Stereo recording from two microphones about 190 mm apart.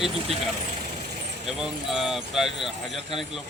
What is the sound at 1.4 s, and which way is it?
Speech, centre (ahead or behind).